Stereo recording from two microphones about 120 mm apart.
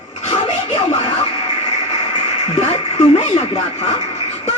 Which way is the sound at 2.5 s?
55° left (ahead or behind).